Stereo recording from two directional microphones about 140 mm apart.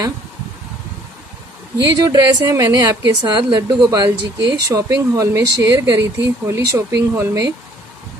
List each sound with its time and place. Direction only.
1.8 s a woman's voice: 30° right (ahead or behind)